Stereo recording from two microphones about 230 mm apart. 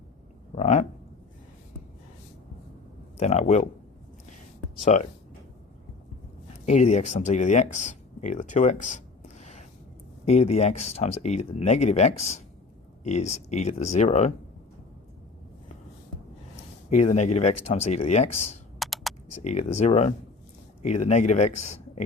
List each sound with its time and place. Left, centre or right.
0.5 s speech: left
3.2 s speech: left
4.9 s speech: left
6.7 s speech: left
9.4 s a sound: left
10.2 s speech: left
16.9 s speech: left
18.8 s computer keyboard: centre
19.4 s speech: left
21.5 s speech: left